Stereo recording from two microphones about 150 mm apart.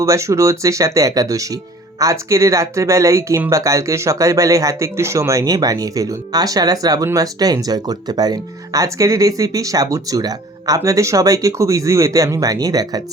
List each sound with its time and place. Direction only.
0.0 s speech: 20° right (ahead or behind)